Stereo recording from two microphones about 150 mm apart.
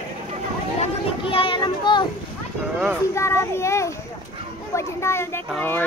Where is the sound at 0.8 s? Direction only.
35° left (ahead or behind).